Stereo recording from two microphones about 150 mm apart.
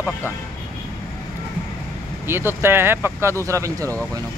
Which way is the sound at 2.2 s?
15° right (ahead or behind).